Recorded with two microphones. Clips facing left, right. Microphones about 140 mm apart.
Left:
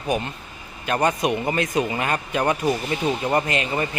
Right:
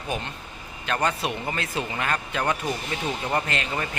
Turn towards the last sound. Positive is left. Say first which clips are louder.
# left 5 dB
turn(degrees=10)  # may be behind; listen again after turning